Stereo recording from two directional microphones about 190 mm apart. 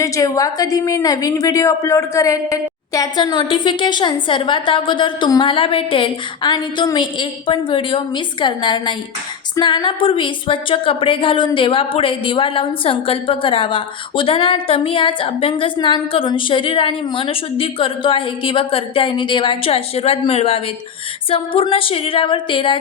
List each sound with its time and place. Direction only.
0.0 s a woman's voice: 20° left (ahead or behind)